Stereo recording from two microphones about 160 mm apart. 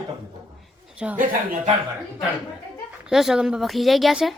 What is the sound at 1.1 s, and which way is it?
Speech, 55° right (ahead or behind).